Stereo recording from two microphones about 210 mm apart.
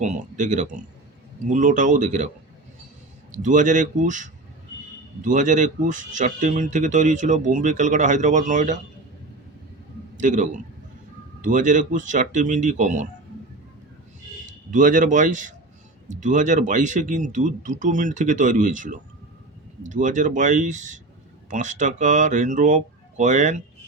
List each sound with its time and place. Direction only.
0.0 s speech: 35° right (ahead or behind)
3.3 s speech: 35° right (ahead or behind)
10.2 s speech: 35° right (ahead or behind)
14.7 s speech: 40° right (ahead or behind)